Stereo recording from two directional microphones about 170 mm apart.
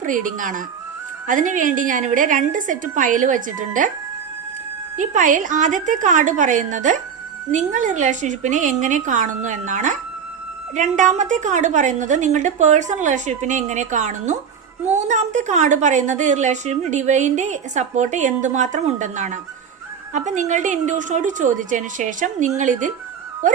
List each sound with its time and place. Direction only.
0.0 s a woman's voice: 50° right (ahead or behind)
4.9 s a woman's voice: 50° right (ahead or behind)